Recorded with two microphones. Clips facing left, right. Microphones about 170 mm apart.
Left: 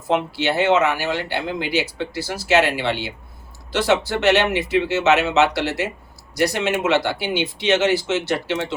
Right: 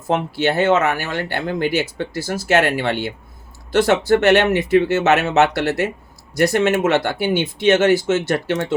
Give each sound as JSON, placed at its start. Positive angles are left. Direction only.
{"t": 0.1, "sound": "speech", "side_deg": -45}